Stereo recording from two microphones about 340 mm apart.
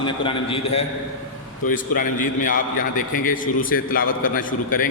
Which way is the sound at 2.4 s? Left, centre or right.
Left.